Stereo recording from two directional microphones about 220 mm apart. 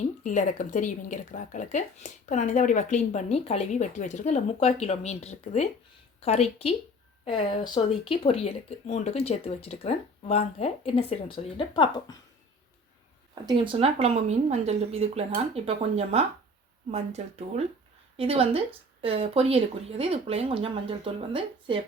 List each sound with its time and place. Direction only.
0.3 s speech: 35° left (ahead or behind)
13.4 s speech: 20° right (ahead or behind)